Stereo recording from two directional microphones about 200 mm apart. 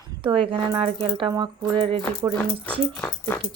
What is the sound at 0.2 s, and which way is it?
Speech, 25° right (ahead or behind).